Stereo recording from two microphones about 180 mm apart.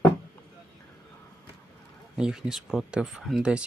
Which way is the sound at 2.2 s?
5° right (ahead or behind).